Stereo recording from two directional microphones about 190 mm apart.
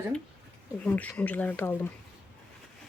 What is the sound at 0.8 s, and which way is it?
Speech, 5° left (ahead or behind).